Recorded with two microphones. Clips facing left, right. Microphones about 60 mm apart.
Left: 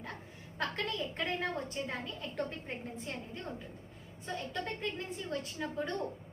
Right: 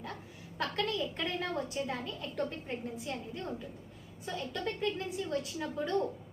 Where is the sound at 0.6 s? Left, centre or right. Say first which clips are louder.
Right 2 dB; left.